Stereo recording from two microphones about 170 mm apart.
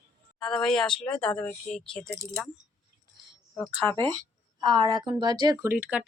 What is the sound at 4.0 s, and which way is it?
Speech, 25° right (ahead or behind).